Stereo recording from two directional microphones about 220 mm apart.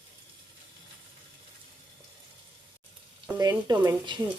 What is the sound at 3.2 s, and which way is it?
Speech, 15° right (ahead or behind).